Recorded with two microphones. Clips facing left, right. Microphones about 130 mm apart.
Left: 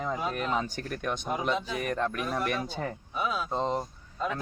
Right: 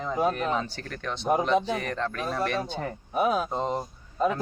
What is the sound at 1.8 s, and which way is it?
Speech, 10° left (ahead or behind).